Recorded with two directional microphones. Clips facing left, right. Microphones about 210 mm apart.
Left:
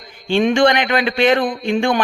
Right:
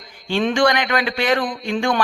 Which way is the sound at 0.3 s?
25° left (ahead or behind).